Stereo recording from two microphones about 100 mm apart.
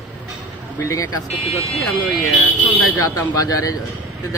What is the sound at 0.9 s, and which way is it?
Speech, 35° left (ahead or behind).